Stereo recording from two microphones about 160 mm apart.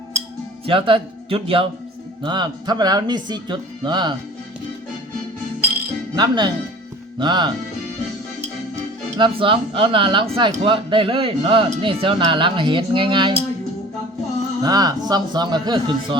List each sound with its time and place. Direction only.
0.6 s speech: 35° right (ahead or behind)
6.1 s speech: 30° right (ahead or behind)
9.1 s speech: 30° right (ahead or behind)
14.6 s speech: 25° right (ahead or behind)